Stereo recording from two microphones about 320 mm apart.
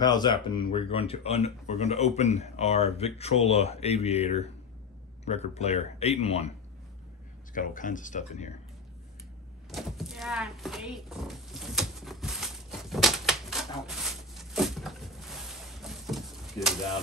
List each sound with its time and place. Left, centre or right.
0.0 s speech: centre
7.5 s speech: left
9.7 s a sound: centre